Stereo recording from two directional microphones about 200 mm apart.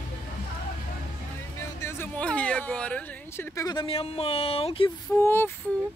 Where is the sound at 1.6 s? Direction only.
15° left (ahead or behind).